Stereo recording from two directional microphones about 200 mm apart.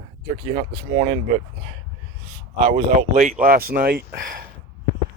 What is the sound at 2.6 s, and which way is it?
A man's voice, 40° right (ahead or behind).